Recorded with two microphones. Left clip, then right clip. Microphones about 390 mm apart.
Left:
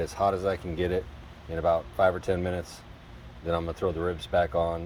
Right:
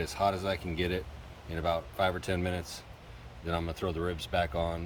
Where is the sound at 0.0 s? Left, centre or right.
Centre.